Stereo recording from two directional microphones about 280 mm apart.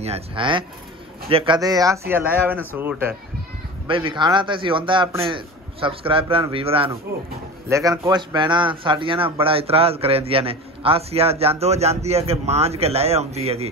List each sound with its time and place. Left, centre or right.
0.0 s a man's voice: centre
3.8 s a man's voice: centre